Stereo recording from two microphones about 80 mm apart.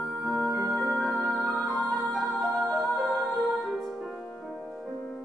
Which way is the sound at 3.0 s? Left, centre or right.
Centre.